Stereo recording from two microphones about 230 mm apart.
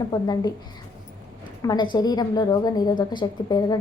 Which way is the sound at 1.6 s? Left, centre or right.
Centre.